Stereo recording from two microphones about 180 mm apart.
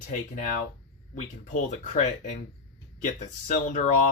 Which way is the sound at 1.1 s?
45° left (ahead or behind).